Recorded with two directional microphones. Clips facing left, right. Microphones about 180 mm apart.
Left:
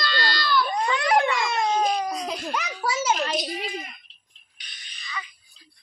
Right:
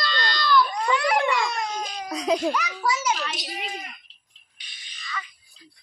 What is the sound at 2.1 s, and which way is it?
Laughter, 80° right.